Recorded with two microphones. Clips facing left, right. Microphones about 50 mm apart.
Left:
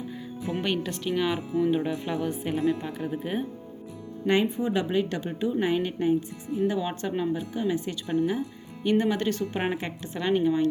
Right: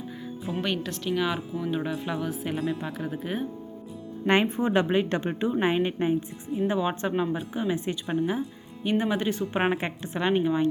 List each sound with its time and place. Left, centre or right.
0.6 s speech: centre
4.3 s a woman's voice: right